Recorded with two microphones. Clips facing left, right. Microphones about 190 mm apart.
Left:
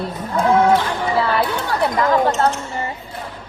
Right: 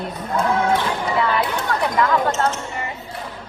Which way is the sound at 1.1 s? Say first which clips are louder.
Left 2 dB; 35° left (ahead or behind).